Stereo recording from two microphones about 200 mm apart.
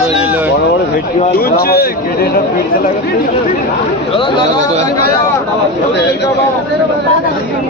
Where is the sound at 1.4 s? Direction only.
50° left (ahead or behind).